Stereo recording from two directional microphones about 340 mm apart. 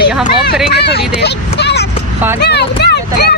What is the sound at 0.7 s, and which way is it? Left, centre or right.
Speech, left.